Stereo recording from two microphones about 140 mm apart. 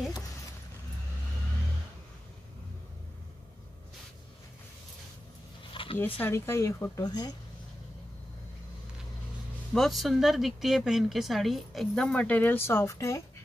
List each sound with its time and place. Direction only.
5.7 s a sound: 40° left (ahead or behind)
6.1 s speech: 15° left (ahead or behind)
9.8 s speech: centre (ahead or behind); by 13.2 s 20° left (ahead or behind)